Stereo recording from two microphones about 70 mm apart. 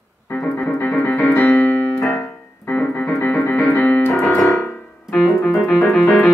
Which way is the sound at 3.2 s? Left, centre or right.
Left.